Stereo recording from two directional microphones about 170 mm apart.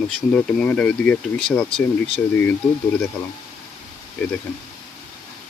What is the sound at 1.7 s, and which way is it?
Speech, 35° left (ahead or behind).